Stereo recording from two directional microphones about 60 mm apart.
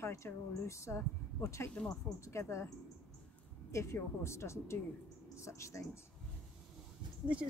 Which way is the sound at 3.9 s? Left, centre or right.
Left.